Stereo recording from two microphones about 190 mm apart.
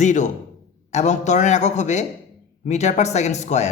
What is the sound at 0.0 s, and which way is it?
Speech, 40° left (ahead or behind).